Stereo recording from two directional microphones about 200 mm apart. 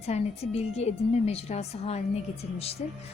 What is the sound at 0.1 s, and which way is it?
A woman's voice, 30° left (ahead or behind).